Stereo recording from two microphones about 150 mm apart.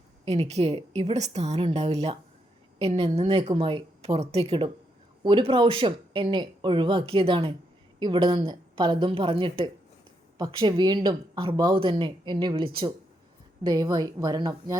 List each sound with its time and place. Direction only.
0.3 s a woman's voice: 45° right (ahead or behind); by 14.8 s 25° right (ahead or behind)